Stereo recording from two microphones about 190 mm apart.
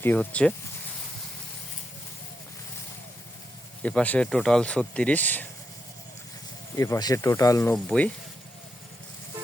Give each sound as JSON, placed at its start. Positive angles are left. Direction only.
{"t": 0.0, "sound": "speech", "side_deg": 10}
{"t": 3.8, "sound": "speech", "side_deg": 10}
{"t": 6.7, "sound": "speech", "side_deg": 15}
{"t": 7.7, "sound": "speech", "side_deg": 5}